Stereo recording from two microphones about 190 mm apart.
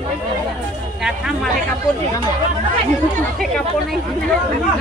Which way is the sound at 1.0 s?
5° right (ahead or behind).